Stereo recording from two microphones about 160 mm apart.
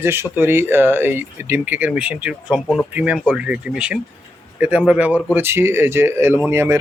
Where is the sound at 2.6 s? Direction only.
10° left (ahead or behind).